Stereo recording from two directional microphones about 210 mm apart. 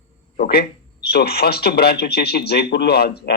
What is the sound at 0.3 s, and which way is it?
Speech, 50° left (ahead or behind).